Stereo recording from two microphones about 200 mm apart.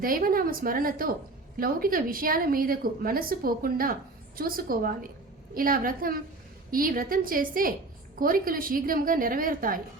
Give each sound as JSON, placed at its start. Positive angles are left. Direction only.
{"t": 0.0, "sound": "a woman's voice", "side_deg": -45}